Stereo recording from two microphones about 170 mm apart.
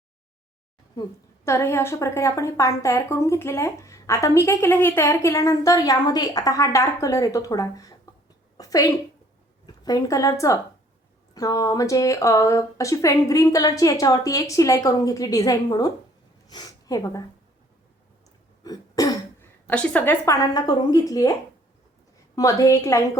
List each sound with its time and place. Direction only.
1.5 s a woman's voice: 15° left (ahead or behind)
8.5 s a sound: 20° left (ahead or behind)
9.6 s a woman's voice: 20° left (ahead or behind)
18.6 s throat clearing: 20° left (ahead or behind)
19.6 s a woman's voice: 10° left (ahead or behind)
22.4 s a woman's voice: 20° left (ahead or behind)